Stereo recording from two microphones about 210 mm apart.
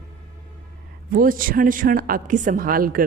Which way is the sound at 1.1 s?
40° right (ahead or behind).